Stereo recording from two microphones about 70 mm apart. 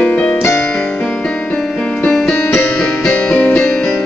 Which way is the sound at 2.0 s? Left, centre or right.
Centre.